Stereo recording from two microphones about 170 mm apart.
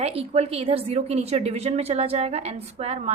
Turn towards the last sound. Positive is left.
turn(degrees=-40)  # may be behind; listen again after turning